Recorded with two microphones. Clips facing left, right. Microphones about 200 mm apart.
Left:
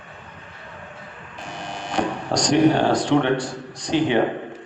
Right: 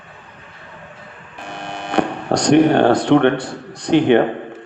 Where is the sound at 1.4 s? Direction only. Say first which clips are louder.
Right 3 dB; 60° right (ahead or behind).